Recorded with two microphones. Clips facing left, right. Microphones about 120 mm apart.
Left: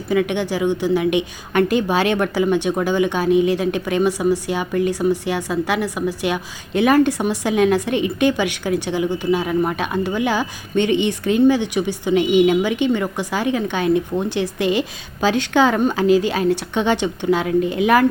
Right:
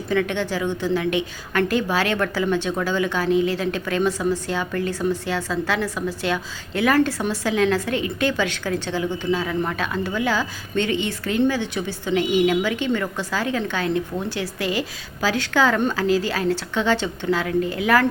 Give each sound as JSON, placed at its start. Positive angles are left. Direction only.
{"t": 0.1, "sound": "a woman's voice", "side_deg": 15}